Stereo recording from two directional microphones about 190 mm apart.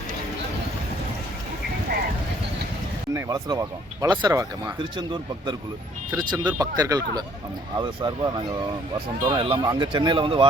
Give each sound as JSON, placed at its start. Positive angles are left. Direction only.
{"t": 3.2, "sound": "speech", "side_deg": -20}